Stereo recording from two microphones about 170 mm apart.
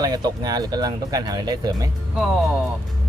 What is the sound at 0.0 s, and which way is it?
Speech, 25° right (ahead or behind).